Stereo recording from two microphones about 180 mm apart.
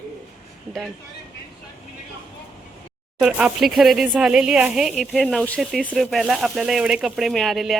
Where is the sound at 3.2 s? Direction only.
5° right (ahead or behind).